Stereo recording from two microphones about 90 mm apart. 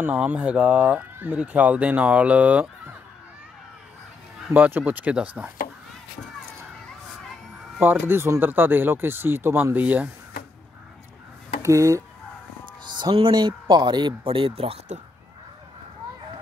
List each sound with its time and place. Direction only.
0.0 s speech: 15° right (ahead or behind)
4.6 s speech: 20° right (ahead or behind)
7.8 s speech: 25° right (ahead or behind)
11.6 s speech: 35° right (ahead or behind)
13.1 s speech: 60° right (ahead or behind); by 14.8 s 85° right